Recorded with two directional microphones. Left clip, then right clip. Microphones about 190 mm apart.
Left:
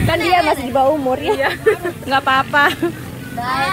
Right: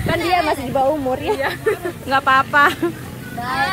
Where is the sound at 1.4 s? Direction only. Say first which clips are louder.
Left 4 dB; 30° left (ahead or behind).